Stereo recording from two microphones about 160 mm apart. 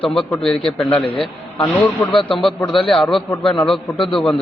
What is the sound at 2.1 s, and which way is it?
Speech, 35° left (ahead or behind).